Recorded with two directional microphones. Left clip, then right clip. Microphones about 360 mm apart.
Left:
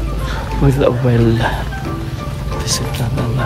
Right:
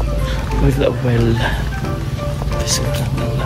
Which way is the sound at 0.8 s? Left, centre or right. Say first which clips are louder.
Left 4 dB; centre.